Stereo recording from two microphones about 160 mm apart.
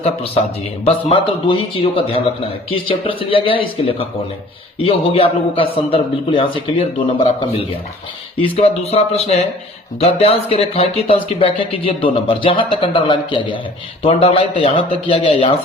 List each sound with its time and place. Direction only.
1.1 s speech: 35° left (ahead or behind)